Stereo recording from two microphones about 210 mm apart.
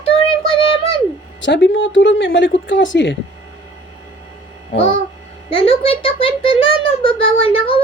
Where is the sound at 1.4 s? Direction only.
60° left (ahead or behind).